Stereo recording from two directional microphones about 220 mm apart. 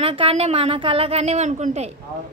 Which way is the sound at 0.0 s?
25° right (ahead or behind).